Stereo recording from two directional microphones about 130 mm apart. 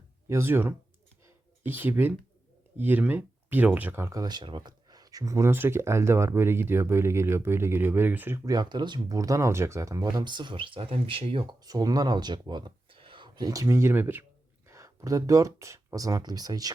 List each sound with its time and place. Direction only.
0.3 s speech: 20° right (ahead or behind)
8.4 s speech: 35° right (ahead or behind)